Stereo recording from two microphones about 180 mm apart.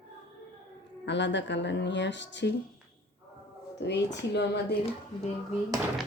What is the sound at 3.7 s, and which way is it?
A woman's voice, 70° left (ahead or behind).